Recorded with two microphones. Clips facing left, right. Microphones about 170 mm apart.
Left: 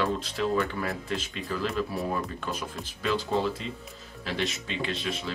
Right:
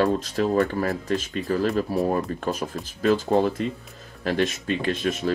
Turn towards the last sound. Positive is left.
turn(degrees=-50)  # may be behind; listen again after turning